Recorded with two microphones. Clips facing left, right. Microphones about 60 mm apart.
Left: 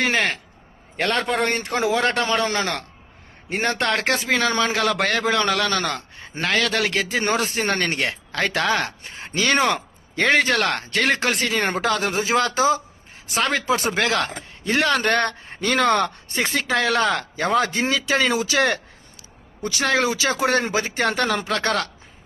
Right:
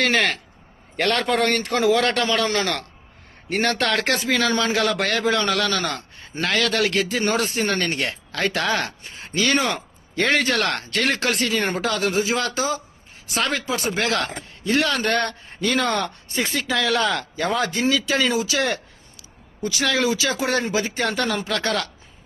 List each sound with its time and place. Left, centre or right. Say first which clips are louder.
1.0 s a man's voice: right 1 dB; centre
1.4 s a man's voice: right 2 dB; centre; by 21.8 s left